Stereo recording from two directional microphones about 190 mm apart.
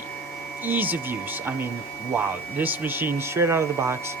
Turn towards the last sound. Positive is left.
turn(degrees=-15)  # may be behind; listen again after turning